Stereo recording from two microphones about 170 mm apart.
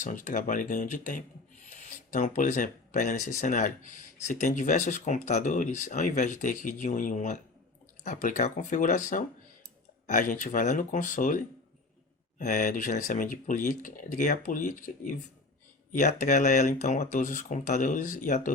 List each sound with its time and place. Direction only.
0.0 s speech: 50° left (ahead or behind)